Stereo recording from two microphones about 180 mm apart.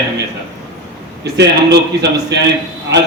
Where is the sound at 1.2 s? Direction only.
65° right (ahead or behind).